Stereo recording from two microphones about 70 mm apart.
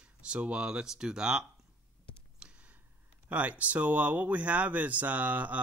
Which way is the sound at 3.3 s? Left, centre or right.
Right.